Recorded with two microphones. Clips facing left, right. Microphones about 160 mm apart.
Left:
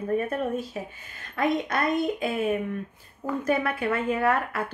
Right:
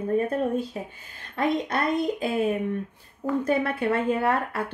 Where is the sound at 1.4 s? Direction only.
30° right (ahead or behind).